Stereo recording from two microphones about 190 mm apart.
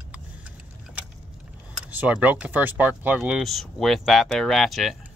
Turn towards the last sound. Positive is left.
turn(degrees=0)  # may be behind; listen again after turning